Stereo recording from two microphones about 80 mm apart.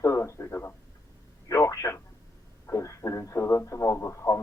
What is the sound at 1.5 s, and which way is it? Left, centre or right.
Telephone, left.